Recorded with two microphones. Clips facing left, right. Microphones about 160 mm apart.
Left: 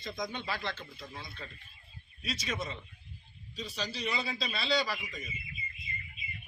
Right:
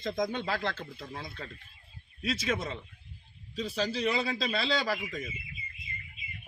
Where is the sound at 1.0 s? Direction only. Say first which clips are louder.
Right 4 dB; 60° right (ahead or behind).